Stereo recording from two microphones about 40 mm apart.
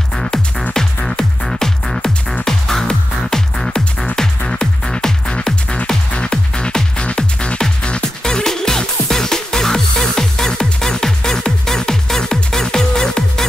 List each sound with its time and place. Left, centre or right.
0.1 s music: centre